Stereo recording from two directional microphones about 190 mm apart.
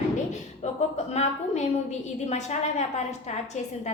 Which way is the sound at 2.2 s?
35° left (ahead or behind).